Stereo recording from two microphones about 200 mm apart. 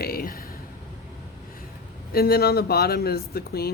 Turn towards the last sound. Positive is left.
turn(degrees=50)  # may be behind; listen again after turning